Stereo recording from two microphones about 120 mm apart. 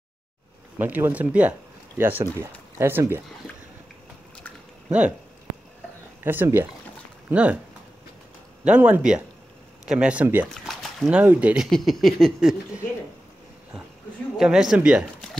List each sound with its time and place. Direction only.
0.7 s speech: 15° right (ahead or behind)
4.8 s speech: 10° right (ahead or behind)
6.2 s speech: 20° right (ahead or behind)
8.6 s speech: 10° right (ahead or behind)
10.5 s a sound: 5° left (ahead or behind)
11.1 s speech: 10° right (ahead or behind)
11.7 s speech: centre (ahead or behind)
14.3 s speech: 5° right (ahead or behind)